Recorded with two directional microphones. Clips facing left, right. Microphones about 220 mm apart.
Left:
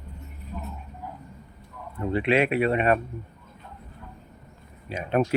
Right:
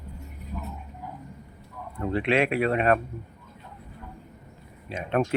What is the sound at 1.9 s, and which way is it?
Speech, 5° left (ahead or behind).